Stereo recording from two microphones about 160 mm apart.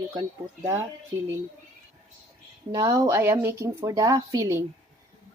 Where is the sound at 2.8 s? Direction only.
20° right (ahead or behind).